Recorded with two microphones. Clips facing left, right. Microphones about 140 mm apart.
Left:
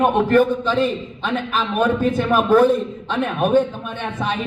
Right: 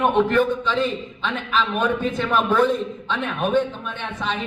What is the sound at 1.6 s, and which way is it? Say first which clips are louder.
A man's voice: left 3 dB; 5° left (ahead or behind).